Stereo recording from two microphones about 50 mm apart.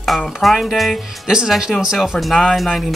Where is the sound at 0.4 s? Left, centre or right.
Centre.